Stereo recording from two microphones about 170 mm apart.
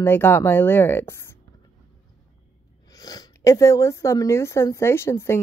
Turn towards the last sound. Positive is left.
turn(degrees=15)  # may be behind; listen again after turning